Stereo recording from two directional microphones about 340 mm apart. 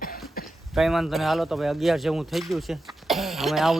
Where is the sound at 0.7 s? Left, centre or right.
Centre.